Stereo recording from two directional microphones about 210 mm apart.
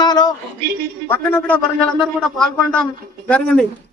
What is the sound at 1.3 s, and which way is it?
A man's voice, 10° left (ahead or behind).